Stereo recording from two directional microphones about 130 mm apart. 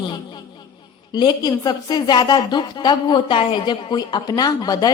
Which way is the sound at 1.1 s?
30° left (ahead or behind).